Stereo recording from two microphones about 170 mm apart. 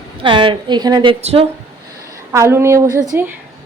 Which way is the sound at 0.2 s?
30° right (ahead or behind).